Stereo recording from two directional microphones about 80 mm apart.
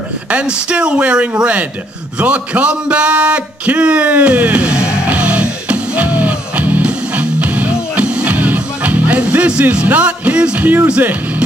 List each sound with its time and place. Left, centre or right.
0.3 s speech: centre
2.1 s a sound: centre
11.0 s speech: right